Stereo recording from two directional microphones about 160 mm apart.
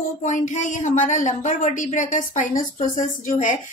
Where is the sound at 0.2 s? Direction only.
50° left (ahead or behind).